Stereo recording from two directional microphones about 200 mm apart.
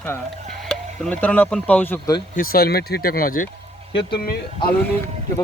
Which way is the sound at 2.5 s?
50° left (ahead or behind).